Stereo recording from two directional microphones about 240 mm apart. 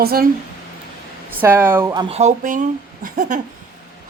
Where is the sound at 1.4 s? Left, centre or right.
Centre.